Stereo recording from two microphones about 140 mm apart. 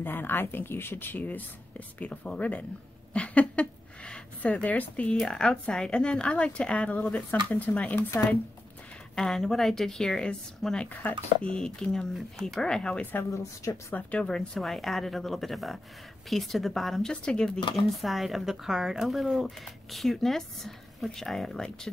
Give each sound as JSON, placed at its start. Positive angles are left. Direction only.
{"t": 0.0, "sound": "speech", "side_deg": 15}
{"t": 14.1, "sound": "speech", "side_deg": 5}